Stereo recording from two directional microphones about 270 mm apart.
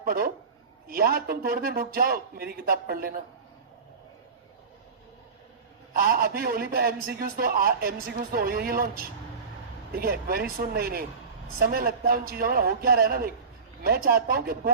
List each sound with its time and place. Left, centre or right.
0.0 s a man's voice: right
5.9 s a man's voice: right